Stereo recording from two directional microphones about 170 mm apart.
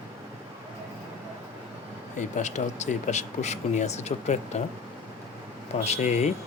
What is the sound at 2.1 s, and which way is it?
Speech, 45° left (ahead or behind).